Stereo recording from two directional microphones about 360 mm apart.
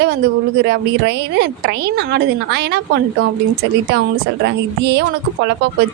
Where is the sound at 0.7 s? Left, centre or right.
Right.